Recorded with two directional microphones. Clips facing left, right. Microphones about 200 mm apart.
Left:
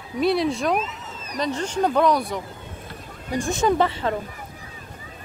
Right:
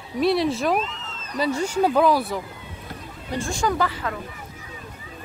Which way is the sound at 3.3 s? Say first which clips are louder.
Left 3 dB; 20° left (ahead or behind).